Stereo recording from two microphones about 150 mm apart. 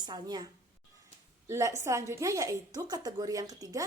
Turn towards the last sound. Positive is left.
turn(degrees=-25)  # may be behind; listen again after turning